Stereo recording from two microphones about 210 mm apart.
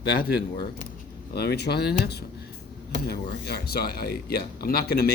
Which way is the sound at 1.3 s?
50° left (ahead or behind).